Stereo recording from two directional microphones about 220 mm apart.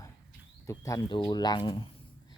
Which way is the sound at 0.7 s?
15° left (ahead or behind).